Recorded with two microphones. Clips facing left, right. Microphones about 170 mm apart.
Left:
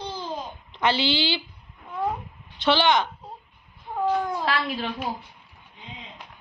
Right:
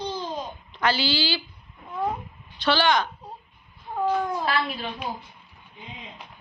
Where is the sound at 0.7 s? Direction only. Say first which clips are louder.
Left 2 dB; 25° left (ahead or behind).